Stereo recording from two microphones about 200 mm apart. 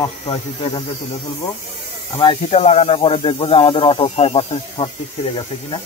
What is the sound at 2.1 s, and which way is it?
Speech, 25° left (ahead or behind).